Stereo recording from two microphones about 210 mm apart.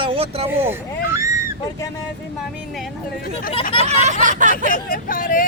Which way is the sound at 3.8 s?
30° right (ahead or behind).